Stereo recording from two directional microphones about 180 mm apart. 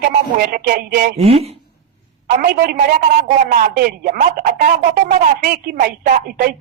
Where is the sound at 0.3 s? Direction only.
55° right (ahead or behind).